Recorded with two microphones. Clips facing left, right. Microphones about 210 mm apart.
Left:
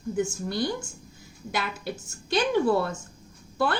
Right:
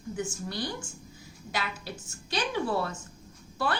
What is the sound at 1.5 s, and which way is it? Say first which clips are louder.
Speech: left 4 dB; 55° left (ahead or behind).